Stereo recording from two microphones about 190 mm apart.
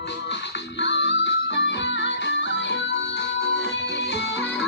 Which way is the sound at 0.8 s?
70° left (ahead or behind).